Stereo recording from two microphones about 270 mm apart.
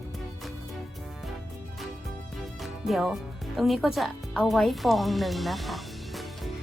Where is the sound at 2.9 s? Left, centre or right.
Centre.